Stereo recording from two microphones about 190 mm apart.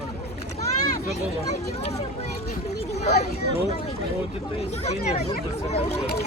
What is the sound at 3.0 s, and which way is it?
Speech, 35° left (ahead or behind).